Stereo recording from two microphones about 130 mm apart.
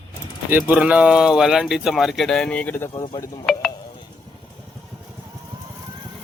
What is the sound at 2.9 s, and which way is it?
Speech, 40° left (ahead or behind).